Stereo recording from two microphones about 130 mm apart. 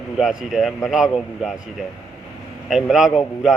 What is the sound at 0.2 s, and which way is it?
A man's voice, 5° right (ahead or behind).